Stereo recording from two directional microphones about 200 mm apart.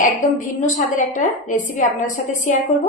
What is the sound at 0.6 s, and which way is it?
A woman's voice, 40° left (ahead or behind).